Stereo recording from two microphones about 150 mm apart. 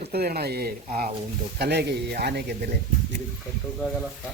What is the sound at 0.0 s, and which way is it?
A man's voice, 90° right.